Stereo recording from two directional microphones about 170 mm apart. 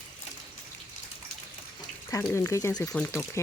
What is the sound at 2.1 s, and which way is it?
Speech, 15° left (ahead or behind).